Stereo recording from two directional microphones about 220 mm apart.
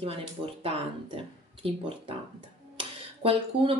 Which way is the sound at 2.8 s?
25° right (ahead or behind).